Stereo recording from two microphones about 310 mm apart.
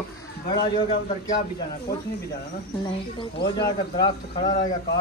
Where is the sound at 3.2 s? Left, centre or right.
Centre.